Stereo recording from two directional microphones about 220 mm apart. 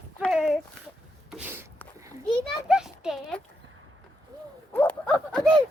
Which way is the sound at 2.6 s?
5° right (ahead or behind).